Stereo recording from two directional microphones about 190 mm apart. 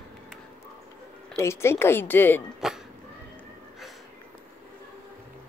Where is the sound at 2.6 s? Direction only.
Centre (ahead or behind).